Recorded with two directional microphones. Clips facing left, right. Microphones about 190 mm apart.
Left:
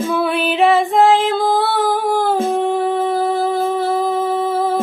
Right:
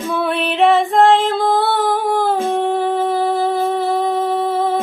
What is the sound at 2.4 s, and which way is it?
Humming, centre (ahead or behind).